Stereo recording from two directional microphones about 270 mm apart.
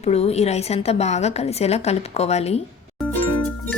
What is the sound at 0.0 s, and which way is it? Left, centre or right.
A woman's voice, left.